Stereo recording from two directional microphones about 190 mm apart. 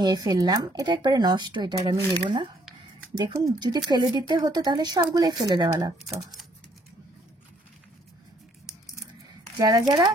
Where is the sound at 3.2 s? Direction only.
20° right (ahead or behind).